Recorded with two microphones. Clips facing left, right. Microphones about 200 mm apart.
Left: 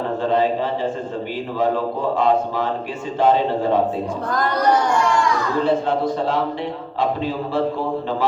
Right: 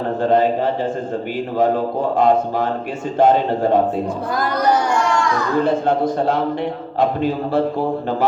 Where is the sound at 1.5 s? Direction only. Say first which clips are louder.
Right 3 dB; 45° right (ahead or behind).